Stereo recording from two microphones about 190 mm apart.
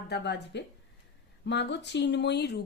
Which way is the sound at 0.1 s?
65° left (ahead or behind).